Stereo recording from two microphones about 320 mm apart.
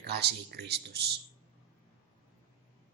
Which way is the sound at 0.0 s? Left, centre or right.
Right.